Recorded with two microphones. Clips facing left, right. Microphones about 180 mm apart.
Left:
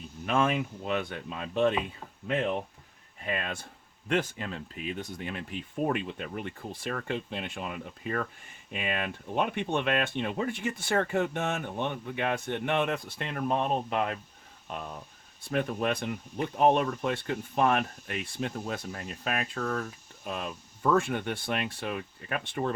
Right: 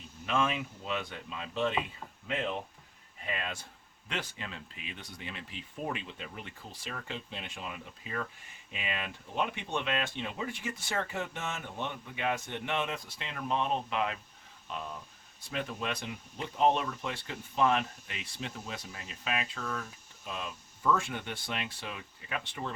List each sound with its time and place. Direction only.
0.3 s speech: 50° left (ahead or behind)
3.2 s speech: 55° left (ahead or behind)
4.1 s speech: 45° left (ahead or behind)